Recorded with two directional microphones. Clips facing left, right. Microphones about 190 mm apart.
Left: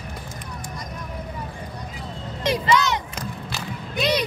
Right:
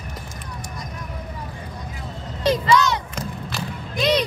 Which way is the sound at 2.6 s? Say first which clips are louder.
Even; 20° left (ahead or behind).